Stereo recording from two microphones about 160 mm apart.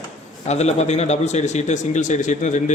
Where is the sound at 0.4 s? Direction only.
45° left (ahead or behind).